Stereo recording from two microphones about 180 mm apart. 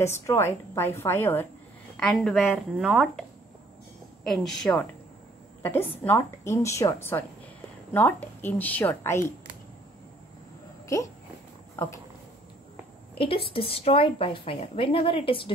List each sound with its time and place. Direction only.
0.0 s a woman's voice: 15° left (ahead or behind)
11.7 s a sound: 15° left (ahead or behind)
13.5 s speech: 30° left (ahead or behind)